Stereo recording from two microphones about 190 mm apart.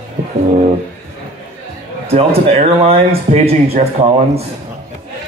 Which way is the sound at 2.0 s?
30° right (ahead or behind).